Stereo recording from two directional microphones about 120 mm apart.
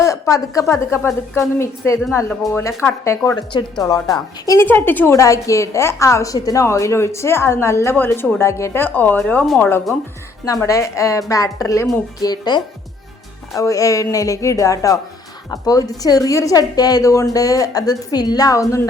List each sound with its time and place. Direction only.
0.0 s a sound: 25° left (ahead or behind)
0.7 s a woman's voice: 25° left (ahead or behind)
3.3 s a woman's voice: 35° left (ahead or behind)
4.6 s a woman's voice: 15° left (ahead or behind)
10.4 s a woman's voice: 25° left (ahead or behind)